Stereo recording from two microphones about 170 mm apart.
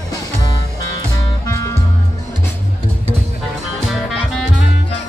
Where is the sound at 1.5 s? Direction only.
20° left (ahead or behind).